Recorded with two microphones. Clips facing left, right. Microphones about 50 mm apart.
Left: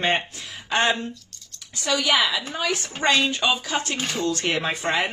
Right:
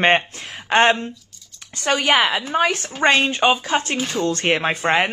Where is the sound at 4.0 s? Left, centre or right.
Centre.